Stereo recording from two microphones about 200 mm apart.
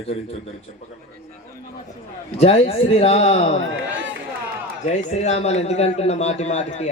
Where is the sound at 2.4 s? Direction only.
30° left (ahead or behind).